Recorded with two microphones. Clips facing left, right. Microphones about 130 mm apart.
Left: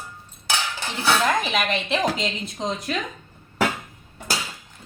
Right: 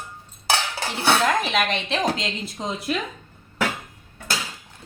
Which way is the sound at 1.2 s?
Centre (ahead or behind).